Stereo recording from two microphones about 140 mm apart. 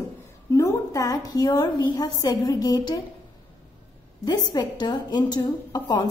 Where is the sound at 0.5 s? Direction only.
20° left (ahead or behind).